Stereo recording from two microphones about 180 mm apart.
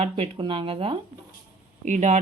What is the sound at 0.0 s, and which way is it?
Speech, 30° right (ahead or behind).